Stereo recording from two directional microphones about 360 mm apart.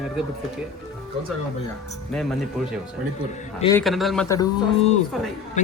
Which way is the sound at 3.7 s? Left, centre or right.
Centre.